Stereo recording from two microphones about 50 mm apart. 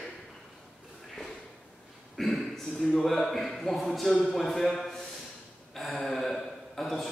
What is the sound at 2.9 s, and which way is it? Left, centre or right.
A man's voice, centre.